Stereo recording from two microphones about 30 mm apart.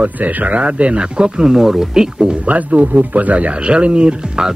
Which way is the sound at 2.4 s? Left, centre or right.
Right.